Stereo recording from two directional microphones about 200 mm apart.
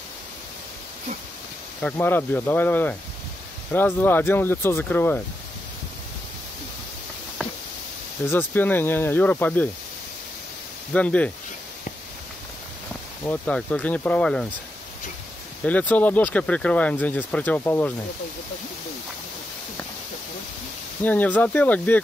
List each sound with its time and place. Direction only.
1.8 s speech: 10° left (ahead or behind)
8.3 s speech: 10° left (ahead or behind)
10.9 s speech: 5° left (ahead or behind)
13.2 s speech: 10° left (ahead or behind)
15.6 s speech: 5° left (ahead or behind)
21.0 s speech: 10° left (ahead or behind)